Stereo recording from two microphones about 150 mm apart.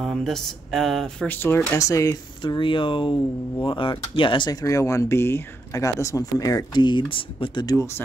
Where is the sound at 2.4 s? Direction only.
35° left (ahead or behind).